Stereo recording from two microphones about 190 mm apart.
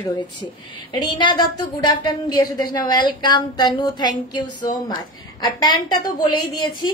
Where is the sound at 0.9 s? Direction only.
20° left (ahead or behind).